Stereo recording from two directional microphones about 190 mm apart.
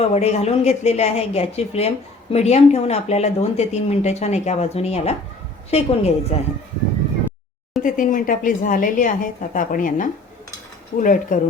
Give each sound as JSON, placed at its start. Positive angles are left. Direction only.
{"t": 0.0, "sound": "speech", "side_deg": 35}
{"t": 7.8, "sound": "speech", "side_deg": 45}